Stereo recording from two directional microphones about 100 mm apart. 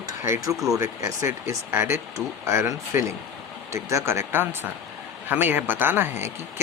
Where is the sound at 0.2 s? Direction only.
30° right (ahead or behind).